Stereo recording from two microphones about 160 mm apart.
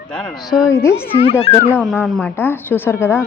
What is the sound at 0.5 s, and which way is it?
Speech, 20° left (ahead or behind).